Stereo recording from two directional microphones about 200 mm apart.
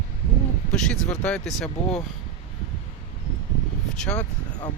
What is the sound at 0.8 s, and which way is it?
Speech, 5° left (ahead or behind).